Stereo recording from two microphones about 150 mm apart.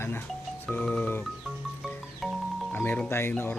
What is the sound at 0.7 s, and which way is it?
Music, 10° left (ahead or behind).